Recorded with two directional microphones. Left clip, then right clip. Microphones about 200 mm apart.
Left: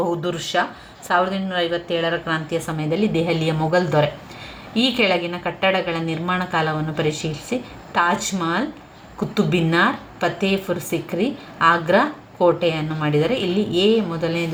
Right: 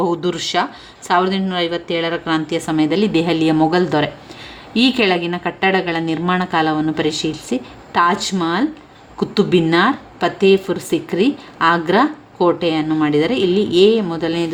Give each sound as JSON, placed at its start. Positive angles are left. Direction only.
{"t": 0.2, "sound": "a woman's voice", "side_deg": -40}